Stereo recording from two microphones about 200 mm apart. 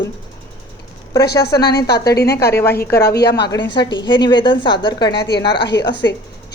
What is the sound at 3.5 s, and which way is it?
A woman's voice, 25° left (ahead or behind).